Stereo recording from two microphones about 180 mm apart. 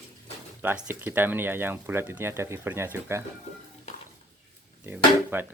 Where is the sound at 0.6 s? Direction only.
10° right (ahead or behind).